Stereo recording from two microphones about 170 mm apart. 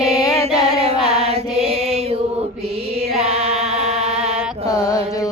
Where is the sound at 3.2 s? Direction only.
35° right (ahead or behind).